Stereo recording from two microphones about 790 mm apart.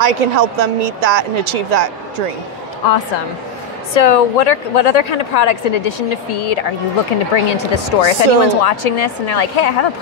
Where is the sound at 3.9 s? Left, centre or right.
Left.